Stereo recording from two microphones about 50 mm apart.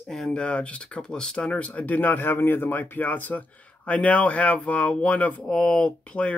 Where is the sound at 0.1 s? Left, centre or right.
Centre; by 2.8 s left.